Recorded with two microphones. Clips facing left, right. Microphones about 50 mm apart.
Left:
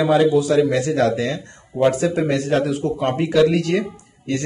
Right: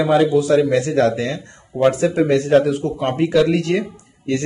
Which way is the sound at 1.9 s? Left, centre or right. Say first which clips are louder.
Right 2 dB; centre.